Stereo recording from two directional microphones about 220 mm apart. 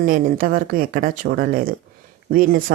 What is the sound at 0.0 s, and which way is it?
Speech, 40° right (ahead or behind).